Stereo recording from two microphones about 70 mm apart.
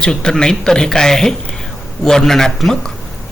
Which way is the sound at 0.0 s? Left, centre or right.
Centre.